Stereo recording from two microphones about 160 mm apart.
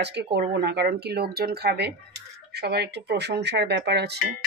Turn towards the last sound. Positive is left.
turn(degrees=-90)